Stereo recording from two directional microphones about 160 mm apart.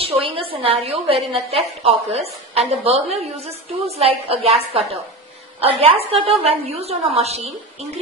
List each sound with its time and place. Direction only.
0.0 s a woman's voice: 35° right (ahead or behind)